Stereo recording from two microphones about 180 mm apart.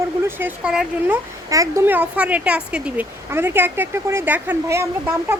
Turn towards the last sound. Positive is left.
turn(degrees=-15)  # may be behind; listen again after turning